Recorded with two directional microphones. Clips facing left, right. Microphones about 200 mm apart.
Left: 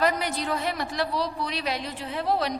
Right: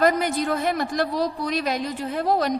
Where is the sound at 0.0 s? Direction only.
45° right (ahead or behind).